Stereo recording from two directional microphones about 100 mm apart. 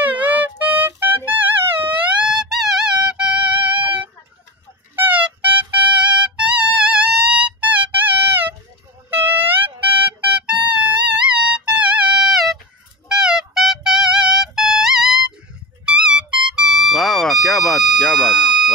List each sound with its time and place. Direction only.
0.0 s music: 15° right (ahead or behind)
4.9 s music: 20° right (ahead or behind); by 18.7 s centre (ahead or behind)